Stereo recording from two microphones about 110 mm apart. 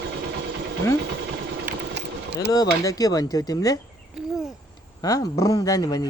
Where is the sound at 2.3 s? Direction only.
35° left (ahead or behind).